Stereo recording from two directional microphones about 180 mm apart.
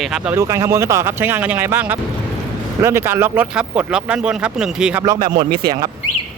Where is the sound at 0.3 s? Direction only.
15° right (ahead or behind).